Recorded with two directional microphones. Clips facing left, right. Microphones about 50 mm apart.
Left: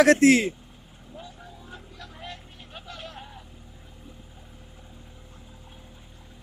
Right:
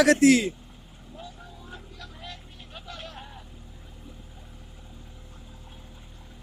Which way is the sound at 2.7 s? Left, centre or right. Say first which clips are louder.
Even; centre.